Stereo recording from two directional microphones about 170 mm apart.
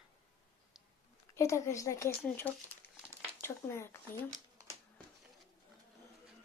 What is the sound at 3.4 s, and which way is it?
Speech, 15° left (ahead or behind).